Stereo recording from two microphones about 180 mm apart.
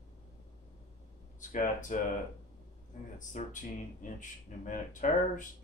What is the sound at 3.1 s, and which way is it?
Speech, 45° left (ahead or behind).